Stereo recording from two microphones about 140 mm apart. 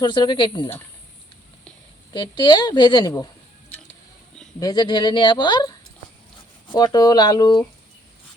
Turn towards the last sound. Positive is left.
turn(degrees=30)  # may be behind; listen again after turning